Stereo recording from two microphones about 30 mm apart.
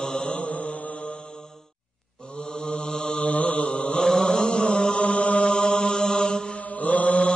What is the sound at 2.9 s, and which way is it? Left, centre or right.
Mantra, left.